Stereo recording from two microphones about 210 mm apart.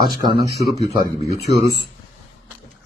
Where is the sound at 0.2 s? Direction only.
20° right (ahead or behind).